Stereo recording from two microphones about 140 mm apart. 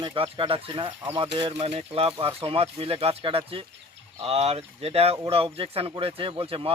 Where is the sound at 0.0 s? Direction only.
35° right (ahead or behind).